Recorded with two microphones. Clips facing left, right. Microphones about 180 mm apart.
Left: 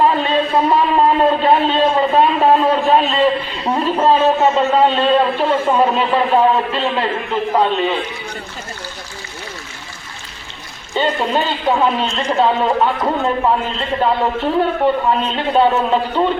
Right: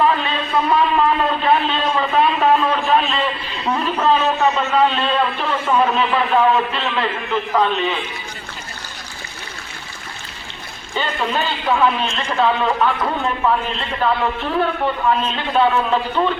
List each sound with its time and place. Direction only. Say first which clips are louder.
0.0 s a man's voice: left 4 dB; 35° left (ahead or behind)
10.9 s a man's voice: left 5 dB; 30° left (ahead or behind)